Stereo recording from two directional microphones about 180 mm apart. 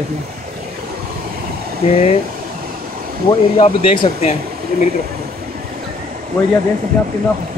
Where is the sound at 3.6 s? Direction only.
30° left (ahead or behind).